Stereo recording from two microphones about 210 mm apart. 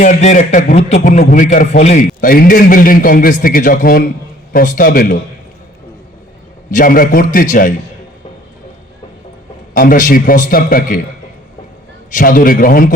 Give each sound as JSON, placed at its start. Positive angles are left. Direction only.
{"t": 0.0, "sound": "a man's voice", "side_deg": 35}
{"t": 6.7, "sound": "a man's voice", "side_deg": 40}
{"t": 9.7, "sound": "a man's voice", "side_deg": 40}
{"t": 12.1, "sound": "a man's voice", "side_deg": 40}